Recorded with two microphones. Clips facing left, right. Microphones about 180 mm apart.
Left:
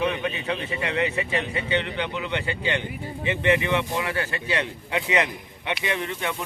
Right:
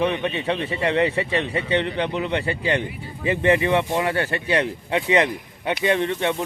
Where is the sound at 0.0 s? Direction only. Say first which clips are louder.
Right 4 dB; 30° right (ahead or behind).